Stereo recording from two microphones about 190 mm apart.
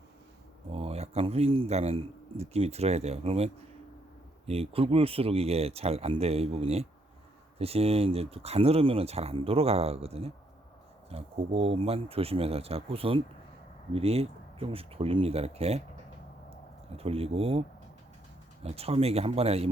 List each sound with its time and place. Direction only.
0.7 s speech: 30° right (ahead or behind)
17.0 s speech: 30° right (ahead or behind)
18.6 s speech: 30° right (ahead or behind)